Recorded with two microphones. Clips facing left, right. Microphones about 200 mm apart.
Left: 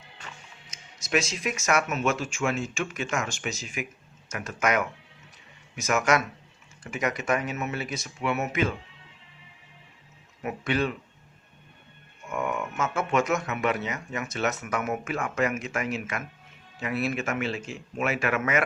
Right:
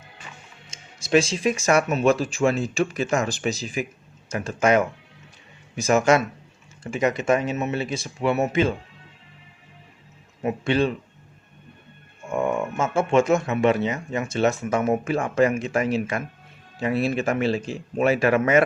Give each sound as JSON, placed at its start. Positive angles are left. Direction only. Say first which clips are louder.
{"t": 0.7, "sound": "speech", "louder": "right 8 dB", "side_deg": -30}
{"t": 10.4, "sound": "speech", "louder": "right 6 dB", "side_deg": -30}
{"t": 12.3, "sound": "speech", "louder": "right 6 dB", "side_deg": -30}